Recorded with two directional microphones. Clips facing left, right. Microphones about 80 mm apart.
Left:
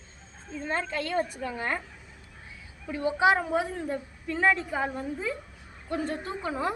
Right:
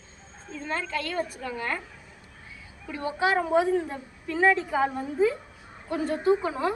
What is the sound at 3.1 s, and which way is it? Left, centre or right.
Speech, centre.